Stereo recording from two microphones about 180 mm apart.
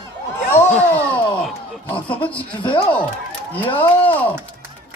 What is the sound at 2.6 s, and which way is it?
Speech, 25° left (ahead or behind).